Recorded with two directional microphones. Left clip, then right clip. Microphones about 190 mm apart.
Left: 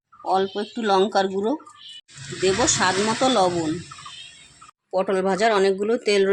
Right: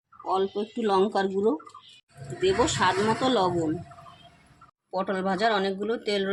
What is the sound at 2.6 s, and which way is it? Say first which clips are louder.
Speech: left 3 dB; 30° left (ahead or behind).